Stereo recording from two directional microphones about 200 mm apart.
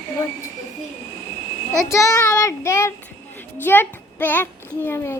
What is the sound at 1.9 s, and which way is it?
A child's voice, 15° left (ahead or behind).